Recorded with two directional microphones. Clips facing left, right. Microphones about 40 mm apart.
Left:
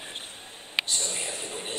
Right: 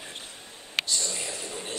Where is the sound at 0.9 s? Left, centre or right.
Left.